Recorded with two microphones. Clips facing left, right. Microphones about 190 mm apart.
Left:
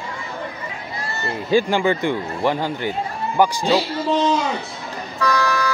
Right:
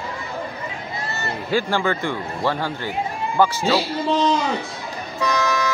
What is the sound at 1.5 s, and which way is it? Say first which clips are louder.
Speech: left 4 dB; 15° left (ahead or behind).